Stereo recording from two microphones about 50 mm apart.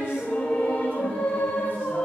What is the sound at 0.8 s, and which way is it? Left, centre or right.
Music, left.